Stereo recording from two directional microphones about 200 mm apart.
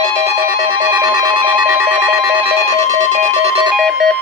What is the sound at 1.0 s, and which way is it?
Music, 20° right (ahead or behind).